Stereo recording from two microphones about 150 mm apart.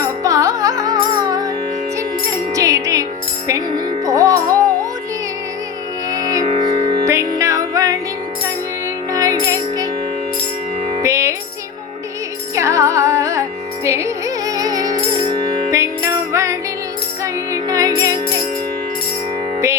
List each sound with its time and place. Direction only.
0.0 s music: 20° right (ahead or behind)
2.5 s music: 20° right (ahead or behind)
6.1 s music: 25° right (ahead or behind)
9.1 s music: 25° right (ahead or behind)
11.0 s music: 20° right (ahead or behind)
12.5 s music: 20° right (ahead or behind)